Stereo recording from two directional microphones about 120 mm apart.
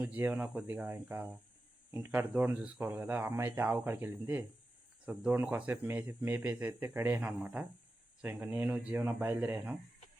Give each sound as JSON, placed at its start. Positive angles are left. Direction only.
{"t": 0.0, "sound": "speech", "side_deg": -10}